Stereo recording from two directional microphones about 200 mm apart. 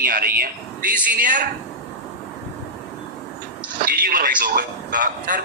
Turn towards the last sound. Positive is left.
turn(degrees=-45)  # may be behind; listen again after turning